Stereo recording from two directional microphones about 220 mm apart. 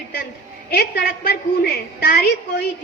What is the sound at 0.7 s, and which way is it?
A woman's voice, 45° left (ahead or behind).